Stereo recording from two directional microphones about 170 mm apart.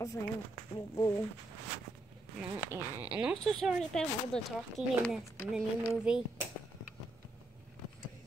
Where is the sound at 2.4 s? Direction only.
10° right (ahead or behind).